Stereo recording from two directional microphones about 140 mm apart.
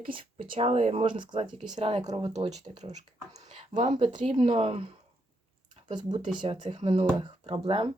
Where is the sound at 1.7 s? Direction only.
45° right (ahead or behind).